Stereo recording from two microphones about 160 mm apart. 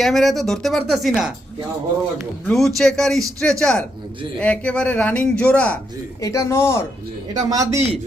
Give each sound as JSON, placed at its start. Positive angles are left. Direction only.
{"t": 0.0, "sound": "a man's voice", "side_deg": 0}
{"t": 2.5, "sound": "a man's voice", "side_deg": 0}
{"t": 6.2, "sound": "speech", "side_deg": 20}
{"t": 7.3, "sound": "a man's voice", "side_deg": -20}